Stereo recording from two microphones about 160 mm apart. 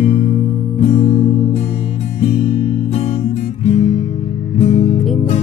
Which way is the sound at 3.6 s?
40° left (ahead or behind).